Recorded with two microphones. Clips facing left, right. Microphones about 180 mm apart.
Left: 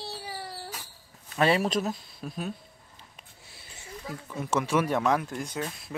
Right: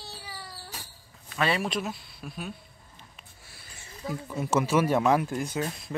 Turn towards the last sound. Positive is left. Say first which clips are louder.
# right 3 dB
turn(degrees=-5)  # may be behind; listen again after turning